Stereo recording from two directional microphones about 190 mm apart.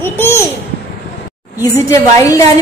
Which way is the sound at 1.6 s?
15° left (ahead or behind).